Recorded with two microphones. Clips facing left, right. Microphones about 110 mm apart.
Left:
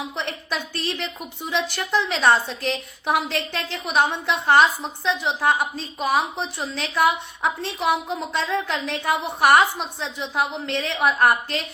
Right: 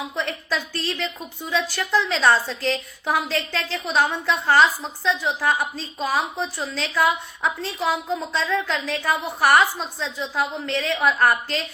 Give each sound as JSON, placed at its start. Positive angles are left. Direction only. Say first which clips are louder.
{"t": 0.2, "sound": "a woman's voice", "louder": "right 4 dB", "side_deg": 25}